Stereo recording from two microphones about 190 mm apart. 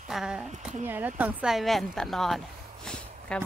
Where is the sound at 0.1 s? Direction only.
Centre (ahead or behind).